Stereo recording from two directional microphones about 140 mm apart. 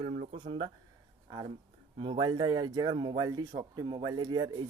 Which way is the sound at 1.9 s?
35° right (ahead or behind).